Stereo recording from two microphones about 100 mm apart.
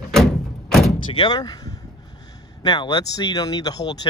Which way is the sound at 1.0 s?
50° left (ahead or behind).